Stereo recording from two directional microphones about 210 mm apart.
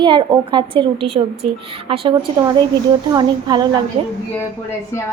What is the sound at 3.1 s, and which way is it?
Speech, 20° right (ahead or behind).